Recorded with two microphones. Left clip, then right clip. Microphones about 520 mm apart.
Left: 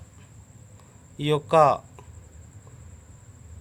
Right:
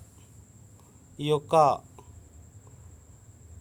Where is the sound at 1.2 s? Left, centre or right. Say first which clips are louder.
Left 3 dB; right.